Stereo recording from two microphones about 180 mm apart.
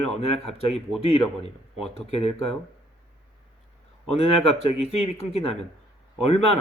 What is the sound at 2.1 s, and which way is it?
Speech, 35° left (ahead or behind).